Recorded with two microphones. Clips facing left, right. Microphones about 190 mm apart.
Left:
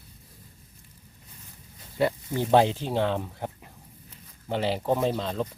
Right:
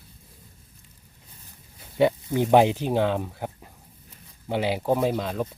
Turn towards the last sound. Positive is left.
turn(degrees=-10)  # may be behind; listen again after turning